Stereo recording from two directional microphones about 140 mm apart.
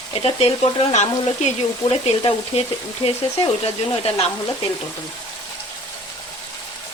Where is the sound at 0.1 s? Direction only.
45° left (ahead or behind).